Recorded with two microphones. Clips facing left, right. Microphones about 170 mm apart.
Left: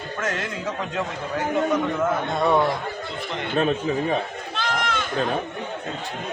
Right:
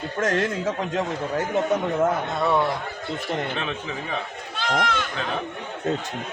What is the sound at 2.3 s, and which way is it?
Speech, 20° left (ahead or behind).